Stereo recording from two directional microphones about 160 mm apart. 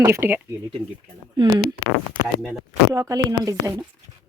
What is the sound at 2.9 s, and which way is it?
Speech, 20° right (ahead or behind).